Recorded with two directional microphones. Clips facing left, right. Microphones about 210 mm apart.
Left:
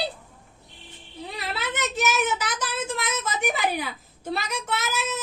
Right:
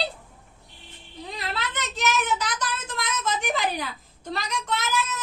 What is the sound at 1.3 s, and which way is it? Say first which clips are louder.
Child singing: left 1 dB; 5° left (ahead or behind).